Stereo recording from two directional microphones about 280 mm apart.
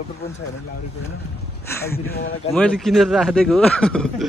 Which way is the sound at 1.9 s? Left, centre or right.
Left.